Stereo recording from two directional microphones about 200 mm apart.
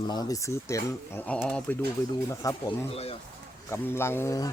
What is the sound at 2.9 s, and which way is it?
Speech, 30° left (ahead or behind).